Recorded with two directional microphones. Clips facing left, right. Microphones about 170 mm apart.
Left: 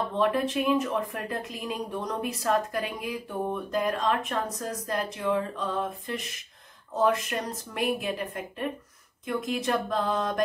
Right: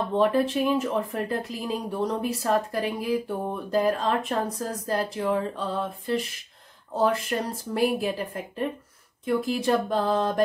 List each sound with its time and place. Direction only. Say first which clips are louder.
0.1 s speech: right 5 dB; 30° right (ahead or behind)